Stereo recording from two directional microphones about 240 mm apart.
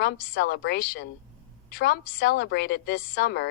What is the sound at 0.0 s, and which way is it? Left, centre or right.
A woman's voice, left.